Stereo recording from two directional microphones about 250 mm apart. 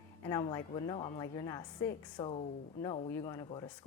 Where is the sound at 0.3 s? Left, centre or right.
Centre.